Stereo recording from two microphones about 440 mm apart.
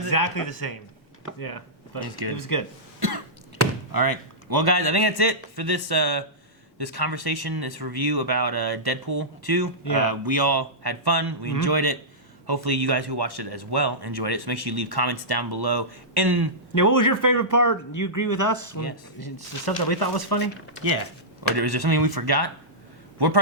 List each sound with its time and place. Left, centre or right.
0.1 s speech: left
3.9 s speech: right
9.8 s speech: left
10.1 s speech: right
16.7 s speech: left
19.2 s speech: left
21.5 s speech: right